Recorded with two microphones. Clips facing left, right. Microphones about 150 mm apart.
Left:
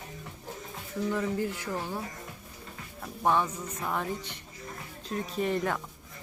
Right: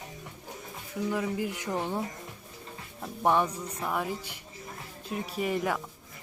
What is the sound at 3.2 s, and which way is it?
A woman's voice, 15° right (ahead or behind).